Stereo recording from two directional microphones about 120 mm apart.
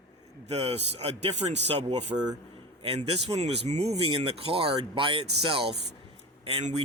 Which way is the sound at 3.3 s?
65° right (ahead or behind).